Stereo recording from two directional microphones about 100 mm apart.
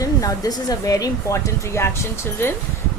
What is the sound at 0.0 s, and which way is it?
Speech, 35° left (ahead or behind).